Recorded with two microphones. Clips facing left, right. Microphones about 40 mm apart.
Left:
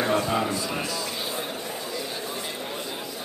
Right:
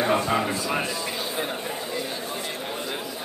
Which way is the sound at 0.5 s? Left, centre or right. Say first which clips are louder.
Right 2 dB; right.